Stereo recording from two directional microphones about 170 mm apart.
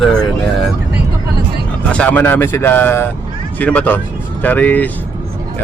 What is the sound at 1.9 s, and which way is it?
Speech, 10° left (ahead or behind).